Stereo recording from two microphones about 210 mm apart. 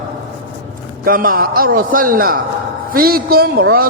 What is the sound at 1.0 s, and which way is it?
A man's voice, 40° right (ahead or behind).